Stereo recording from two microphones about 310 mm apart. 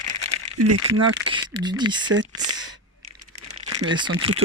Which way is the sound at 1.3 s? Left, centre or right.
Centre.